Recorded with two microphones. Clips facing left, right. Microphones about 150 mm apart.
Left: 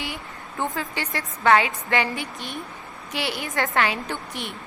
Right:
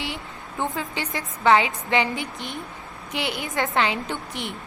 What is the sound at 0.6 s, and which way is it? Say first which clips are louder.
A woman's voice: even; 20° right (ahead or behind).